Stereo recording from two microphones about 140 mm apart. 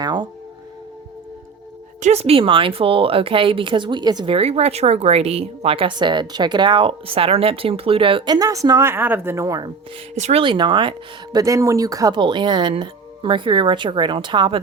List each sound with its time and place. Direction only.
0.0 s music: 30° right (ahead or behind)
2.0 s speech: 50° right (ahead or behind); by 9.7 s 25° right (ahead or behind)
10.2 s speech: 55° right (ahead or behind)
10.4 s speech: 35° right (ahead or behind)